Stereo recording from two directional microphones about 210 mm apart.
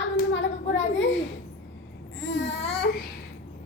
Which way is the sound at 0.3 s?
65° left (ahead or behind).